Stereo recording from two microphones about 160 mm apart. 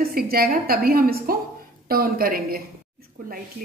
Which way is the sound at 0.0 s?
70° right (ahead or behind).